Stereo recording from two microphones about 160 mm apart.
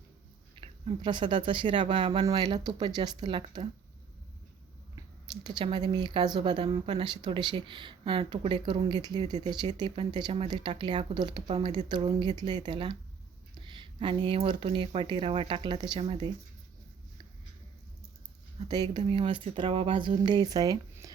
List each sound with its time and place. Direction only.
0.6 s speech: 30° right (ahead or behind)
4.9 s speech: 25° right (ahead or behind)
18.7 s speech: 25° right (ahead or behind)